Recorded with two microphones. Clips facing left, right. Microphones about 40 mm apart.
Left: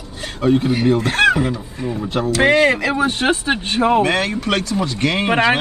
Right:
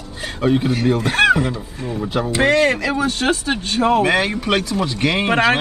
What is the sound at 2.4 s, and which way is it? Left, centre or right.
Speech, centre.